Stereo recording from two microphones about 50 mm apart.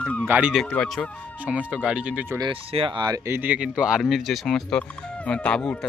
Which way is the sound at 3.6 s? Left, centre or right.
Centre.